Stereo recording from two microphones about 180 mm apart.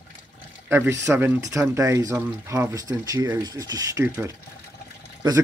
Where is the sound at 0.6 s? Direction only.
15° right (ahead or behind).